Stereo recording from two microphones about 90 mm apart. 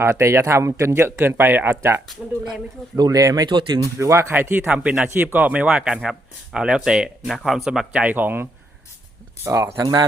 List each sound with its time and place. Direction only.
0.0 s speech: 30° right (ahead or behind)
3.0 s speech: 40° right (ahead or behind)
3.9 s speech: 35° right (ahead or behind)
4.4 s speech: 20° right (ahead or behind)
9.4 s speech: 40° right (ahead or behind)